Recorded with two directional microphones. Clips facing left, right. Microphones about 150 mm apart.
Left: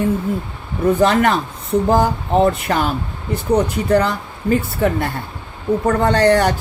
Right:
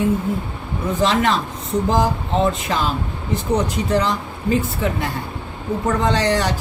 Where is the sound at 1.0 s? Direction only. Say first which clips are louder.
Even; 55° left (ahead or behind).